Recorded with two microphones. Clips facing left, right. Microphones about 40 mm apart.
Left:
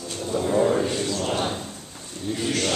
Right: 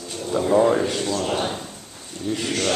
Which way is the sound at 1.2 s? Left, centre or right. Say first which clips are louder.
Right 1 dB; centre.